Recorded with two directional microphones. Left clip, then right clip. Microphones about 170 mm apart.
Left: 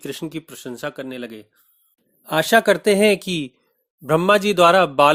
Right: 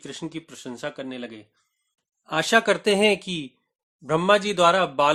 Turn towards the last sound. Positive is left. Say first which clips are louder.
# left 5 dB
turn(degrees=35)  # may be behind; listen again after turning